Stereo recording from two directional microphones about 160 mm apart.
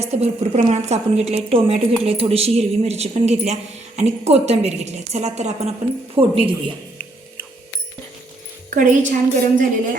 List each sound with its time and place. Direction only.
0.0 s a woman's voice: 45° right (ahead or behind)
8.7 s a woman's voice: 55° right (ahead or behind)